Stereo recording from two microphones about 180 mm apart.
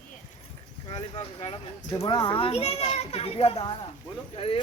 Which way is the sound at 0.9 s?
35° left (ahead or behind).